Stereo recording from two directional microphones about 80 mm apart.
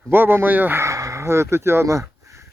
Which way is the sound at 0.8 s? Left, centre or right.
Right.